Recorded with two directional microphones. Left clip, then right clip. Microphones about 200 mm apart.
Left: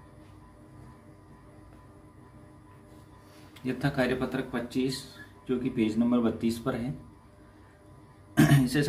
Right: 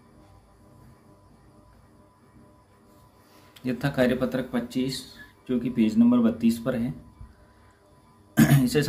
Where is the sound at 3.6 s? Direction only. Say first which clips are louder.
Right 4 dB; 30° right (ahead or behind).